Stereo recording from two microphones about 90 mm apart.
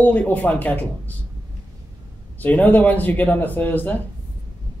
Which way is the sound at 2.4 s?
20° left (ahead or behind).